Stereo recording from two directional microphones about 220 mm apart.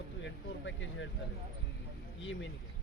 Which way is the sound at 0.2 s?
55° left (ahead or behind).